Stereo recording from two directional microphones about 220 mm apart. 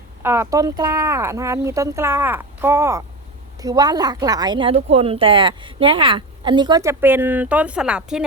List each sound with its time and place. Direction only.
0.2 s speech: 10° right (ahead or behind)